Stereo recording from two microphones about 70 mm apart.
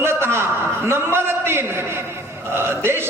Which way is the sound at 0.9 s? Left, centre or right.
Right.